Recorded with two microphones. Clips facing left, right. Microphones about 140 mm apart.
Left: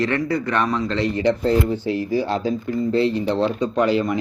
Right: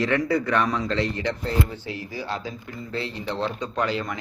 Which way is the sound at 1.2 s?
35° left (ahead or behind).